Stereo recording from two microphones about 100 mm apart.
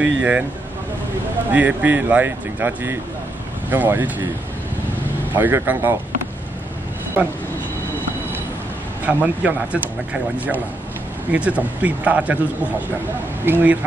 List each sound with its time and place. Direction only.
0.0 s speech: 15° right (ahead or behind)
1.5 s speech: 15° right (ahead or behind)
5.3 s speech: 20° right (ahead or behind)
9.0 s speech: 15° right (ahead or behind)
11.3 s speech: 15° right (ahead or behind)
13.5 s speech: 20° right (ahead or behind)